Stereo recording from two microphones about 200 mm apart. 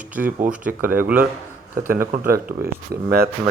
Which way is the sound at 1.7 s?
45° right (ahead or behind).